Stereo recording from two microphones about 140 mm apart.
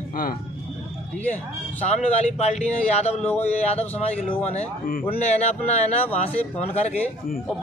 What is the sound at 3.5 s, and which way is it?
A man's voice, 50° left (ahead or behind).